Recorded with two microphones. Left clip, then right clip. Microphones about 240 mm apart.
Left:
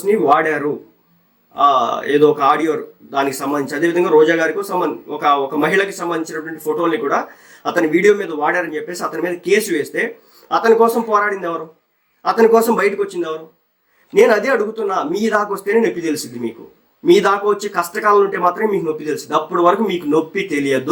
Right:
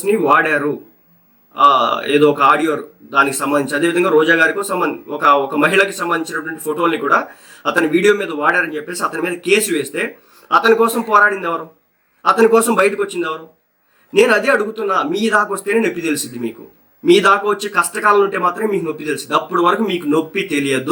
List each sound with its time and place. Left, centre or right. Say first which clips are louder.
0.1 s a man's voice: right 1 dB; centre
1.7 s a man's voice: right 1 dB; centre